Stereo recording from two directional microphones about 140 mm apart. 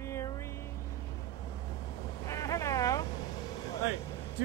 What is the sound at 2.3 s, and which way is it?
Boat, 25° left (ahead or behind).